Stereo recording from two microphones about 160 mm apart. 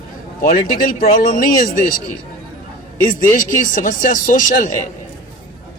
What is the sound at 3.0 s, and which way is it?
Speech, 55° left (ahead or behind).